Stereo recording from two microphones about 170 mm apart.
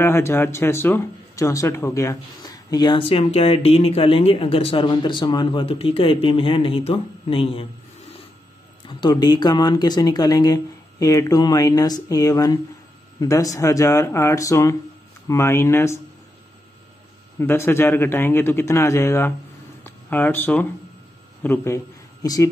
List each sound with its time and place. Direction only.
0.0 s speech: 15° left (ahead or behind); by 7.6 s 30° left (ahead or behind)
8.8 s speech: 25° left (ahead or behind)
17.4 s speech: 15° left (ahead or behind)
19.8 s a sound: 10° left (ahead or behind)
21.4 s a man's voice: 15° left (ahead or behind)